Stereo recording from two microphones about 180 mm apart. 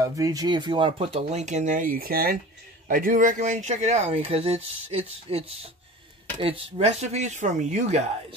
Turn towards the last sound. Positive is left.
turn(degrees=-40)  # may be behind; listen again after turning